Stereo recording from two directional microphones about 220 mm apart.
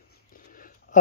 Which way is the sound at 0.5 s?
40° left (ahead or behind).